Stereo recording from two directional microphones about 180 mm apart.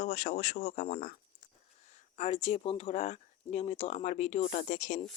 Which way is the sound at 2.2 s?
35° left (ahead or behind).